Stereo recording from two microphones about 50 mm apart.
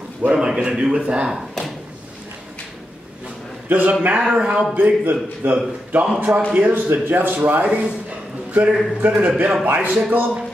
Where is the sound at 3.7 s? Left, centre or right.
Right.